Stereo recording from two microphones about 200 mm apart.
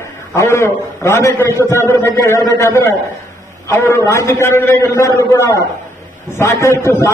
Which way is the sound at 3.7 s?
15° left (ahead or behind).